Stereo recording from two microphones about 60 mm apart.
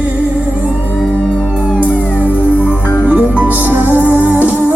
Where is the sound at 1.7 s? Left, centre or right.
Right.